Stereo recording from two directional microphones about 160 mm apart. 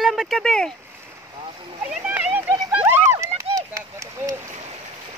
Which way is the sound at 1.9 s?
10° right (ahead or behind).